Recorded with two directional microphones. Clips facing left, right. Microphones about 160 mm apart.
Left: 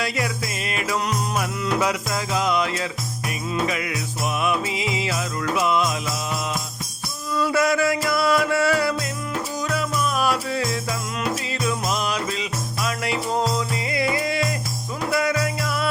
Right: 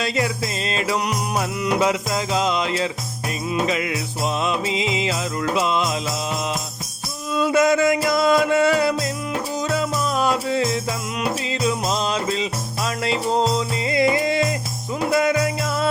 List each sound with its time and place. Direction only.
0.0 s music: 25° right (ahead or behind)